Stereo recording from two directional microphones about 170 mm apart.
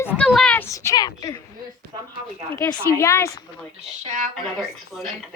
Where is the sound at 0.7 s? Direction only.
15° left (ahead or behind).